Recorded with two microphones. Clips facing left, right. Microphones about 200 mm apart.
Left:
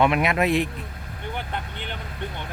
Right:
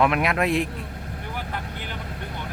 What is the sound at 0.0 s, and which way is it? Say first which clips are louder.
Speech: left 1 dB; centre (ahead or behind).